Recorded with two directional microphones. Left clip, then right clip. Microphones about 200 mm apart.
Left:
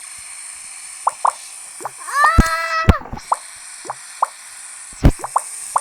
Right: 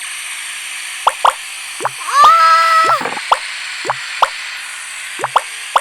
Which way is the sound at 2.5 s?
25° right (ahead or behind).